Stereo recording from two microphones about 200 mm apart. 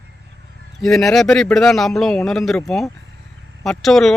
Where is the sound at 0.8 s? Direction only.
Centre (ahead or behind).